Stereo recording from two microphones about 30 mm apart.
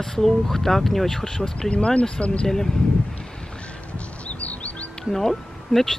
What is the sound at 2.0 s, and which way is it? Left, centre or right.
Speech, left.